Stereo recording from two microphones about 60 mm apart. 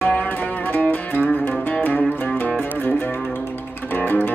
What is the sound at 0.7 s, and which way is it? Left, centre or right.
Music, left.